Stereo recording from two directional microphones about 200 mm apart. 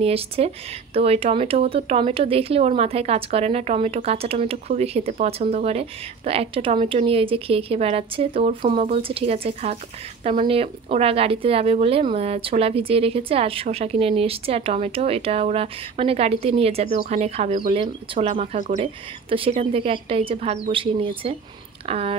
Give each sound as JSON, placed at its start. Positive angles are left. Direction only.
{"t": 0.0, "sound": "speech", "side_deg": -30}